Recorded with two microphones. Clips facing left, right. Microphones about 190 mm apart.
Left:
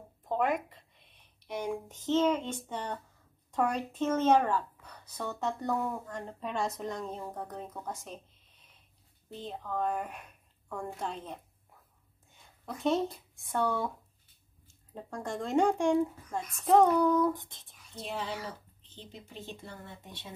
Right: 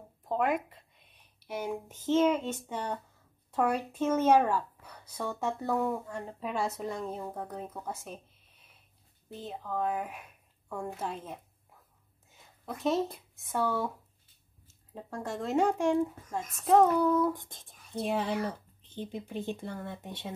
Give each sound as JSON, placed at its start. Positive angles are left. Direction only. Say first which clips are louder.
{"t": 0.3, "sound": "speech", "louder": "right 1 dB", "side_deg": 0}
{"t": 1.9, "sound": "speech", "louder": "right 2 dB", "side_deg": -10}
{"t": 13.4, "sound": "speech", "louder": "even", "side_deg": 0}
{"t": 17.4, "sound": "speech", "louder": "right 2 dB", "side_deg": -45}